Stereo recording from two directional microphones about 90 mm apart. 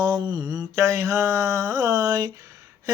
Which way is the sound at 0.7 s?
35° right (ahead or behind).